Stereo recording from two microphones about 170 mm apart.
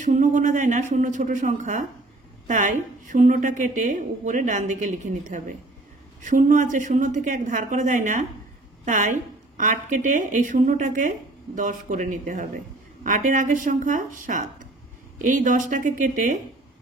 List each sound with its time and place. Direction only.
0.0 s a woman's voice: 45° right (ahead or behind)